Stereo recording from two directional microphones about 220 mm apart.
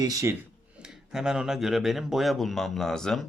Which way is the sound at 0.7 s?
5° right (ahead or behind).